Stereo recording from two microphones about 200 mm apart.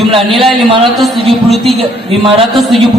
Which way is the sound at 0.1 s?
25° right (ahead or behind).